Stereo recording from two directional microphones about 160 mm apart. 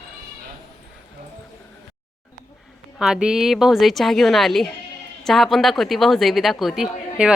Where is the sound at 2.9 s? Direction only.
5° right (ahead or behind).